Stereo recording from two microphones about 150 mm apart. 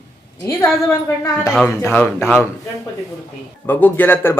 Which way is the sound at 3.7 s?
10° left (ahead or behind).